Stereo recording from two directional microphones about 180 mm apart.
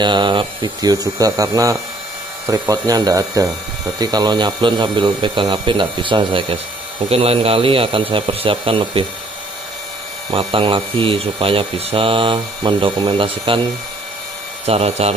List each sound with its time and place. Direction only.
0.0 s speech: 25° right (ahead or behind)
10.3 s speech: 30° right (ahead or behind)
14.7 s speech: 35° right (ahead or behind)